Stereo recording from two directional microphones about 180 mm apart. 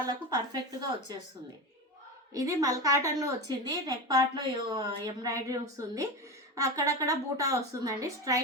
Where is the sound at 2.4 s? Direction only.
20° right (ahead or behind).